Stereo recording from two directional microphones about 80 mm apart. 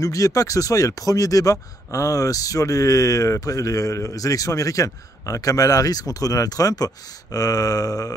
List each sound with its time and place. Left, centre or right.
0.0 s speech: left